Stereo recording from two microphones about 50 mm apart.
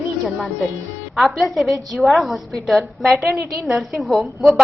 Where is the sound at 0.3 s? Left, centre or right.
Centre.